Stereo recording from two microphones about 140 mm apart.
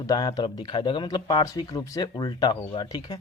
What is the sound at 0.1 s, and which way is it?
Speech, 25° left (ahead or behind).